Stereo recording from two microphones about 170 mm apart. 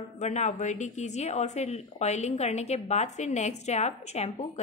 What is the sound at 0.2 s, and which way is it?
Speech, 40° left (ahead or behind).